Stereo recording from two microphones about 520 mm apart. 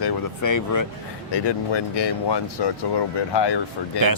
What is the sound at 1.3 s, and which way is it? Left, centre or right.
Speech, left.